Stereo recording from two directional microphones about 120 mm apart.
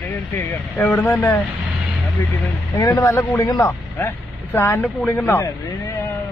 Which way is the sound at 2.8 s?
25° left (ahead or behind).